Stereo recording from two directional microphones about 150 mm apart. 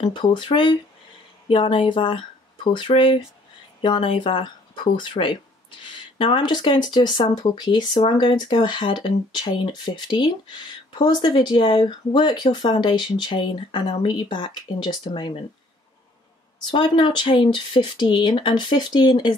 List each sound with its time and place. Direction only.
0.0 s speech: 30° left (ahead or behind)
16.5 s speech: 30° left (ahead or behind)